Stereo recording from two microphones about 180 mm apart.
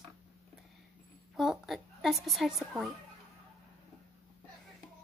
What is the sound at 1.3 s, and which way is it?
A woman's voice, centre (ahead or behind).